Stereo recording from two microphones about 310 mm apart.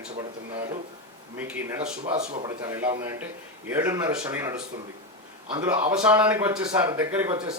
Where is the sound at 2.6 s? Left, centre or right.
Centre.